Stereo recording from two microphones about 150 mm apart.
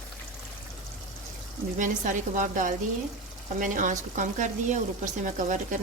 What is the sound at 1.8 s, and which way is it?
Speech, 60° right (ahead or behind).